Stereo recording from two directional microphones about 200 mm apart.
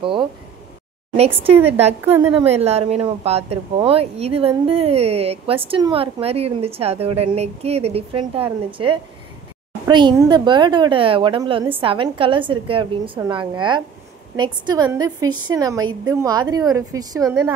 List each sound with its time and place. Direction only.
0.0 s a sound: 25° right (ahead or behind)
1.1 s speech: 30° right (ahead or behind)
2.0 s a woman's voice: 10° right (ahead or behind)
2.3 s a woman's voice: 30° right (ahead or behind)